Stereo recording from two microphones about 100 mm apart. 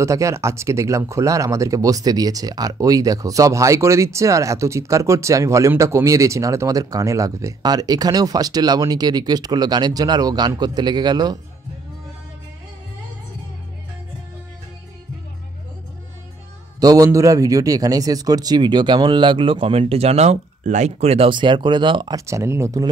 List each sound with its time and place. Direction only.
0.0 s speech: 30° right (ahead or behind)
16.8 s speech: 35° right (ahead or behind); by 21.3 s 90° right
21.3 s speech: 50° right (ahead or behind)
22.1 s speech: 30° right (ahead or behind)